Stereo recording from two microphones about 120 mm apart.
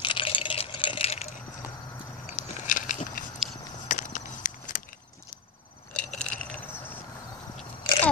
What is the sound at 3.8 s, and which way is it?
Walk, 90° left.